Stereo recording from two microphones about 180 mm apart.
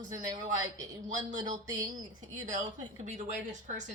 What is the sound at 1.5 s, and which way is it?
Speech, 20° right (ahead or behind).